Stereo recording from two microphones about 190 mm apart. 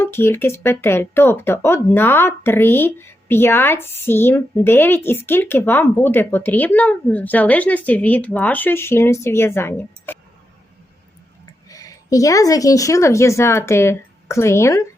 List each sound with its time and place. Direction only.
0.0 s speech: 10° left (ahead or behind)
11.7 s speech: 20° left (ahead or behind)